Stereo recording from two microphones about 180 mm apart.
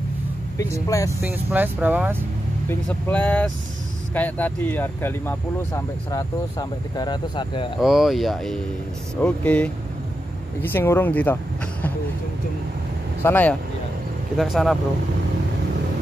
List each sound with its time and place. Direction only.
0.8 s speech: 20° left (ahead or behind)
1.2 s speech: 10° right (ahead or behind)
2.7 s speech: 10° left (ahead or behind); by 7.8 s 25° left (ahead or behind)
7.8 s speech: centre (ahead or behind)
13.2 s speech: 10° left (ahead or behind)
14.3 s speech: centre (ahead or behind)